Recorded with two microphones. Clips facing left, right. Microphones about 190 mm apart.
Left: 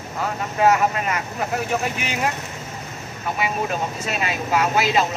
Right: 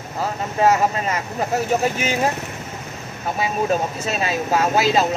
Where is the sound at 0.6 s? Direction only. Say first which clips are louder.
Right 1 dB; 30° right (ahead or behind).